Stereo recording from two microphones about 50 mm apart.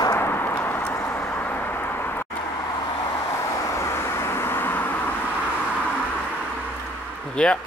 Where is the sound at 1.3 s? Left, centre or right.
Left.